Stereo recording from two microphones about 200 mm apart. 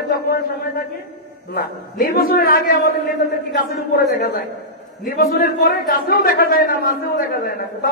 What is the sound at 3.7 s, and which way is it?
A man's voice, 50° left (ahead or behind).